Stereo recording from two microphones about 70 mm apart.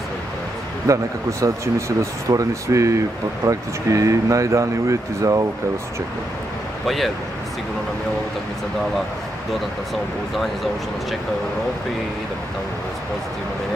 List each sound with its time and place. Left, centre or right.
0.9 s speech: right